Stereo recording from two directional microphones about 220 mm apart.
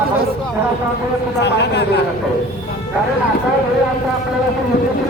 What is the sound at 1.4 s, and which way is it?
Speech, 50° left (ahead or behind).